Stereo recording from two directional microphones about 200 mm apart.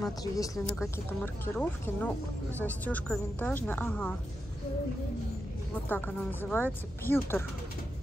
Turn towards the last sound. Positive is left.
turn(degrees=10)  # may be behind; listen again after turning